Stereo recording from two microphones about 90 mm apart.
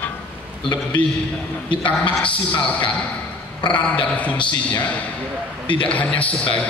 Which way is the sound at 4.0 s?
15° left (ahead or behind).